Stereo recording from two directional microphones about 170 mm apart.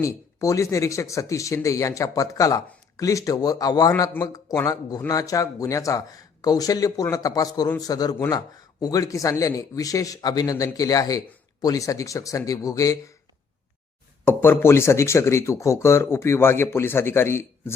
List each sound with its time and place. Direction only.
0.0 s speech: 20° left (ahead or behind)
14.3 s speech: 15° left (ahead or behind)